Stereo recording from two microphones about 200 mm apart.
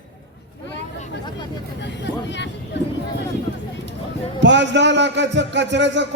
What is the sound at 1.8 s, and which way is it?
Speech, 60° left (ahead or behind).